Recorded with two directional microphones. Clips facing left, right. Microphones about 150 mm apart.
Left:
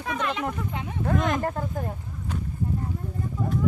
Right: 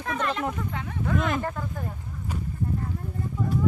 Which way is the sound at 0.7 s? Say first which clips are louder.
Left 1 dB; 20° left (ahead or behind).